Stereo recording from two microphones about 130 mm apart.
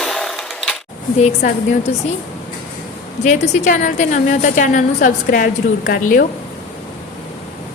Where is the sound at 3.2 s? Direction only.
60° left (ahead or behind); by 6.2 s 90° left.